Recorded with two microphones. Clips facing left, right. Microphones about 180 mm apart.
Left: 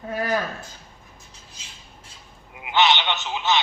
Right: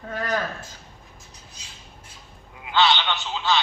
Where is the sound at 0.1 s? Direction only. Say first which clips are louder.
Left 3 dB; 10° left (ahead or behind).